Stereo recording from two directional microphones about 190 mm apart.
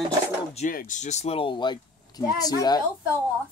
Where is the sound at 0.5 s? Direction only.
45° left (ahead or behind); by 2.8 s 20° left (ahead or behind).